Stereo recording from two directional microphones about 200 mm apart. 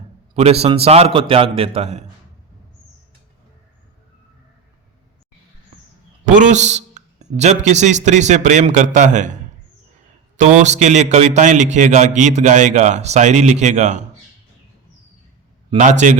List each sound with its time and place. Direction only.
0.3 s a man's voice: 30° right (ahead or behind)
6.2 s a sound: 40° right (ahead or behind)
7.3 s a man's voice: 35° right (ahead or behind)
10.6 s a man's voice: 35° right (ahead or behind)
15.8 s a man's voice: 35° right (ahead or behind)